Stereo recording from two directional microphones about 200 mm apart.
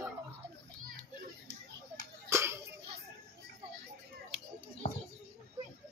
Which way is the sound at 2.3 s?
15° right (ahead or behind).